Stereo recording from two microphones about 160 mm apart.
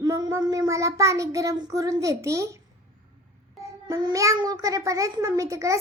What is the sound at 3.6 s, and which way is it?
A child's voice, 25° right (ahead or behind).